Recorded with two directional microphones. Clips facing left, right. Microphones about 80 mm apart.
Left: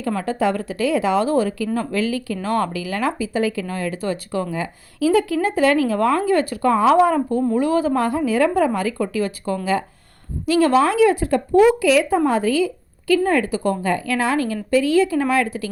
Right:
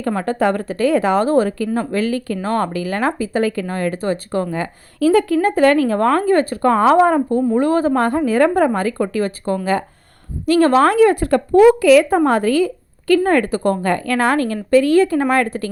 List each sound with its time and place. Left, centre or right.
0.2 s speech: right